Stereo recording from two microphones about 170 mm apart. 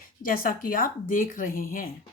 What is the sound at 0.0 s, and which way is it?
Speech, 55° left (ahead or behind).